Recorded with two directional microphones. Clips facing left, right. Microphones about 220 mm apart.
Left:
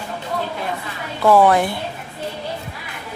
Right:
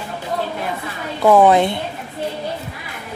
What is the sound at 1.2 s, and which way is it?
Speech, 20° right (ahead or behind).